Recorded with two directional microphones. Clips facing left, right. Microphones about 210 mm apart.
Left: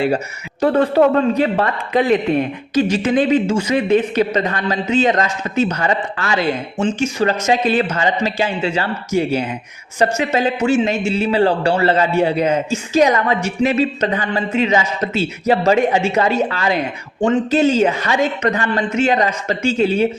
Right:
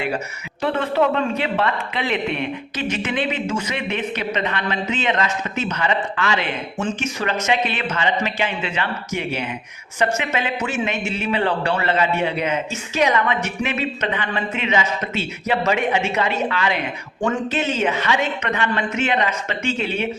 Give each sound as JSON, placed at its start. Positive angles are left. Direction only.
{"t": 0.6, "sound": "a man's voice", "side_deg": 40}